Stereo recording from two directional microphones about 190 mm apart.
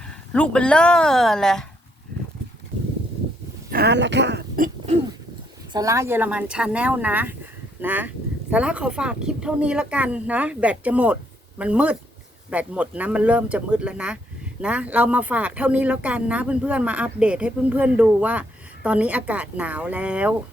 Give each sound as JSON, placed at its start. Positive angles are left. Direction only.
{"t": 0.3, "sound": "speech", "side_deg": 5}
{"t": 3.7, "sound": "speech", "side_deg": -60}
{"t": 5.7, "sound": "speech", "side_deg": -15}